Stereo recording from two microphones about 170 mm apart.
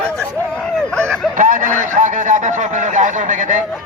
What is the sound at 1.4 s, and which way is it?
A man's voice, 50° right (ahead or behind).